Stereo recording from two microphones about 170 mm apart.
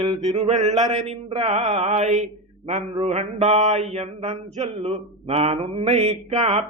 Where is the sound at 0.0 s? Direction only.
35° right (ahead or behind).